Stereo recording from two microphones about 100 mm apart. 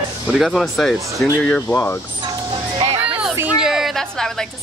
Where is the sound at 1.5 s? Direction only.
15° left (ahead or behind).